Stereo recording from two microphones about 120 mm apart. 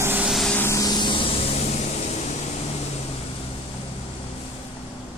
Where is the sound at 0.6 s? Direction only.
25° left (ahead or behind); by 2.3 s 70° left (ahead or behind).